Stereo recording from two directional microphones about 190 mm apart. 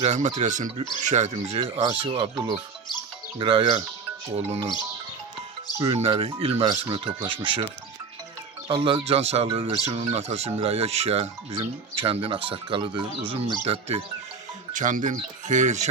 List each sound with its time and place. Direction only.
0.0 s speech: 35° right (ahead or behind)
5.9 s speech: 30° right (ahead or behind)
14.7 s speech: 40° right (ahead or behind)